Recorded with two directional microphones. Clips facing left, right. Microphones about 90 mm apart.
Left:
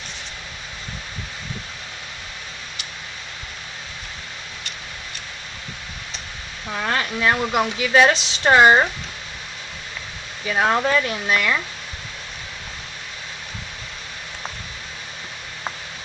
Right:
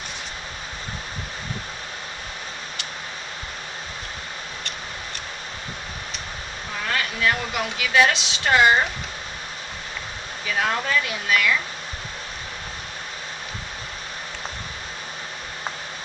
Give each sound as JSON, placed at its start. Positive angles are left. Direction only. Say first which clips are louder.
{"t": 6.9, "sound": "speech", "louder": "left 2 dB", "side_deg": 30}
{"t": 10.5, "sound": "speech", "louder": "left 5 dB", "side_deg": 30}